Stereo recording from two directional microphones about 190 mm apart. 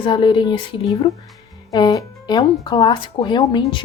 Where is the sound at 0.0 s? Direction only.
25° left (ahead or behind).